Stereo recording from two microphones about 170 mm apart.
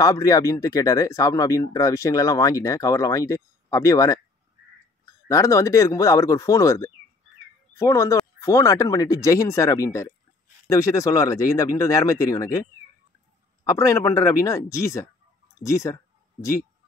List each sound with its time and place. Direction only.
0.0 s speech: 20° left (ahead or behind)
5.3 s speech: 20° left (ahead or behind)
13.7 s speech: 20° left (ahead or behind)
15.6 s a sound: 20° left (ahead or behind)